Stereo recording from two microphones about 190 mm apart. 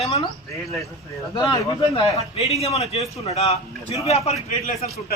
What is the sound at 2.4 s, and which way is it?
A man's voice, 35° left (ahead or behind).